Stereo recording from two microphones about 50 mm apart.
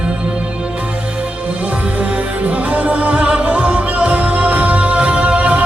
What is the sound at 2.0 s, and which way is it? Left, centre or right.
Music, right.